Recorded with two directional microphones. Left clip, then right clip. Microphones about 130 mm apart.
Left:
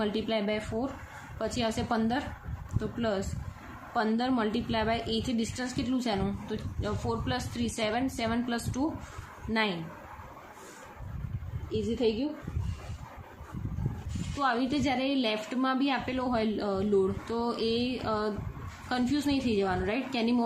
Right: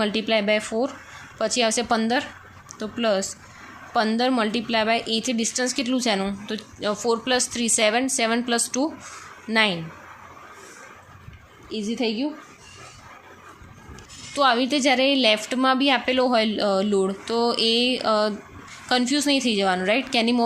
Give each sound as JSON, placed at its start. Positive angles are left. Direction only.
{"t": 0.0, "sound": "a woman's voice", "side_deg": -30}
{"t": 11.7, "sound": "a woman's voice", "side_deg": -90}
{"t": 14.3, "sound": "a woman's voice", "side_deg": -45}